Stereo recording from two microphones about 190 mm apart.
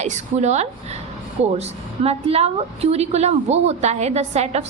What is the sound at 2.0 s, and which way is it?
A woman's voice, 35° right (ahead or behind).